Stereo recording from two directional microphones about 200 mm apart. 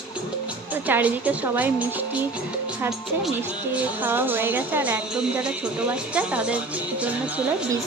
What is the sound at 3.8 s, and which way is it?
A woman's voice, 10° right (ahead or behind).